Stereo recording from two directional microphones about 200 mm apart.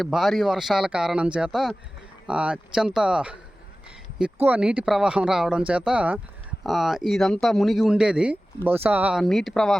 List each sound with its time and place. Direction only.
0.0 s speech: centre (ahead or behind)
4.4 s speech: 5° right (ahead or behind)